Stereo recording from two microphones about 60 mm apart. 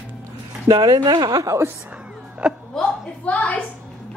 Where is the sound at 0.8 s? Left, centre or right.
Right.